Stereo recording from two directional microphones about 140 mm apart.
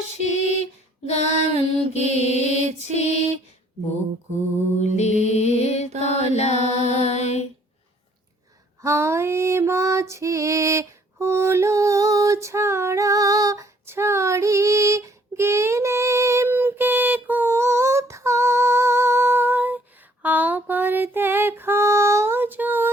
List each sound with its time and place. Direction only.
0.2 s female singing: 50° left (ahead or behind)
1.8 s mantra: 50° left (ahead or behind)
2.3 s music: 50° left (ahead or behind)
2.6 s music: 50° right (ahead or behind)
2.9 s female singing: 50° left (ahead or behind)
4.8 s music: 50° left (ahead or behind)
6.0 s mantra: 50° left (ahead or behind)
8.8 s female singing: 20° right (ahead or behind)